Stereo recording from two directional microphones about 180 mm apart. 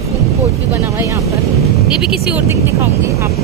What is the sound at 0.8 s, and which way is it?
Speech, 15° right (ahead or behind).